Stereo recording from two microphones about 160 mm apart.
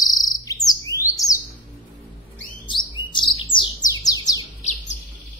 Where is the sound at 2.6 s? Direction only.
30° left (ahead or behind).